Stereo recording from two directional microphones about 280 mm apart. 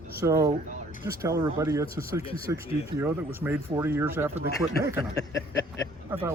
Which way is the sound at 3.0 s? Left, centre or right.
Centre.